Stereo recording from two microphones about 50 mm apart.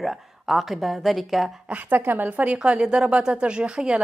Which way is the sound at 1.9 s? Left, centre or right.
Right.